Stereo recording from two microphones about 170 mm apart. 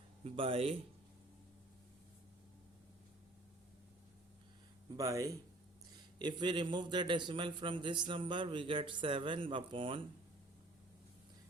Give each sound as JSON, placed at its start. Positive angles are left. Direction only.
{"t": 0.3, "sound": "speech", "side_deg": -35}
{"t": 4.9, "sound": "a man's voice", "side_deg": -20}